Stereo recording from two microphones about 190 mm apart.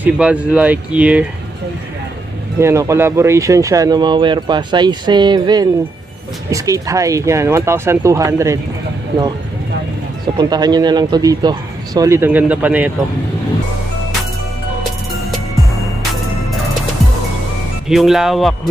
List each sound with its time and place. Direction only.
0.0 s speech: 5° right (ahead or behind)
2.6 s speech: 15° right (ahead or behind)
10.3 s speech: 20° right (ahead or behind)
17.8 s speech: centre (ahead or behind)